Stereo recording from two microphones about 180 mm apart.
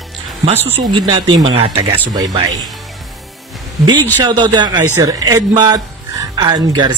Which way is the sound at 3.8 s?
25° right (ahead or behind).